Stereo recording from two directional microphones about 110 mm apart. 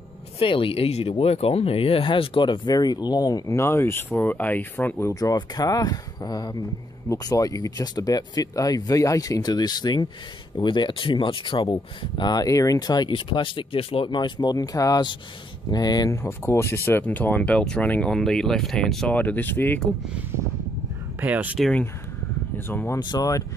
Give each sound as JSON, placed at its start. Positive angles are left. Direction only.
{"t": 0.4, "sound": "speech", "side_deg": 55}
{"t": 5.2, "sound": "speech", "side_deg": 35}
{"t": 16.2, "sound": "speech", "side_deg": 20}
{"t": 19.1, "sound": "speech", "side_deg": 15}
{"t": 20.2, "sound": "speech", "side_deg": -20}
{"t": 22.7, "sound": "speech", "side_deg": 20}
{"t": 22.9, "sound": "speech", "side_deg": 40}